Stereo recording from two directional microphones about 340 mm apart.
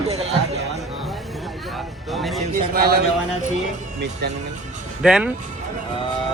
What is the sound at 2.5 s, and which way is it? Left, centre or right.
Speech, right.